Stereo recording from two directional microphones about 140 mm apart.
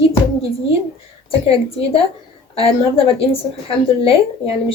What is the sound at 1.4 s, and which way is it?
A woman's voice, 45° left (ahead or behind).